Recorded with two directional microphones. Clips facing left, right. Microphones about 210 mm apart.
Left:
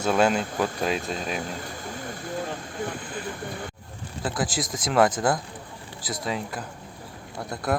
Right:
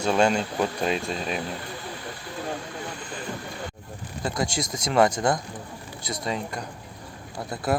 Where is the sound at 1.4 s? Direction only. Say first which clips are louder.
Even; 45° left (ahead or behind).